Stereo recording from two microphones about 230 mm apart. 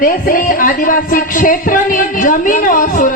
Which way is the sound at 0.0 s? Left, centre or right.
Left.